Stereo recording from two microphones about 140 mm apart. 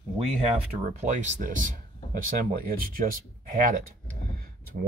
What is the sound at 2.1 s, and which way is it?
Speech, 85° right.